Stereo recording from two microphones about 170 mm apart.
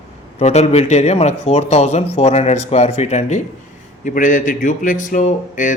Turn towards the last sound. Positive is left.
turn(degrees=50)  # may be behind; listen again after turning